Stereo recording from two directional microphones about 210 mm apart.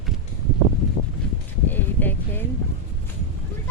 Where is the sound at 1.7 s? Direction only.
10° left (ahead or behind).